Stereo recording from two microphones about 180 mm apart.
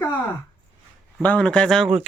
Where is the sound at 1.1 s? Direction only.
5° left (ahead or behind).